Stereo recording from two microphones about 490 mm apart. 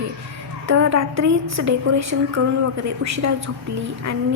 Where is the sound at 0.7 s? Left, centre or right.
Right.